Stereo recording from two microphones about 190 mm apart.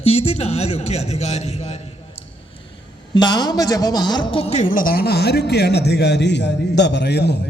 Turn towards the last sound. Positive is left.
turn(degrees=60)  # may be behind; listen again after turning